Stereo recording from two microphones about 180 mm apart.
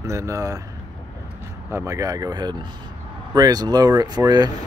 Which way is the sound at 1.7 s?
15° right (ahead or behind).